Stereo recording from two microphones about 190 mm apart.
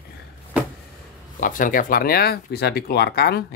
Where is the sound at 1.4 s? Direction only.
45° left (ahead or behind).